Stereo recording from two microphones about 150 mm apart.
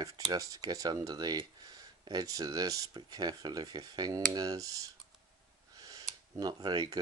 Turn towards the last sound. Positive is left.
turn(degrees=-25)  # may be behind; listen again after turning